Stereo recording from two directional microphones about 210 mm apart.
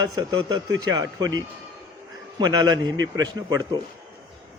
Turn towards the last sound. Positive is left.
turn(degrees=-20)  # may be behind; listen again after turning